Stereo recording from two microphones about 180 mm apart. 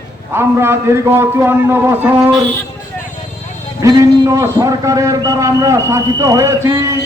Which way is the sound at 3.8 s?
20° right (ahead or behind).